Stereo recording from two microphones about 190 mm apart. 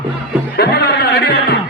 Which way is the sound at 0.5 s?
60° left (ahead or behind).